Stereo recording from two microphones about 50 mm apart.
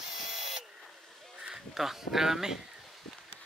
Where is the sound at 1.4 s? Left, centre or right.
Centre.